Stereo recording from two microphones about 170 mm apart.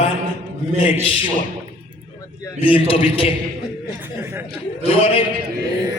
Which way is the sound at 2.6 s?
30° left (ahead or behind).